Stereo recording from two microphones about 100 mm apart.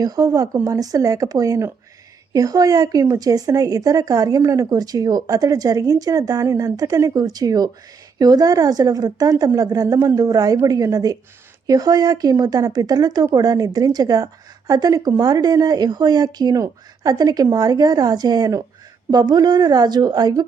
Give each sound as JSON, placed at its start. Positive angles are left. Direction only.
{"t": 0.0, "sound": "a woman's voice", "side_deg": -40}